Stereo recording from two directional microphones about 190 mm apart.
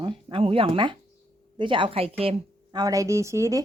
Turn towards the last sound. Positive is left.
turn(degrees=-15)  # may be behind; listen again after turning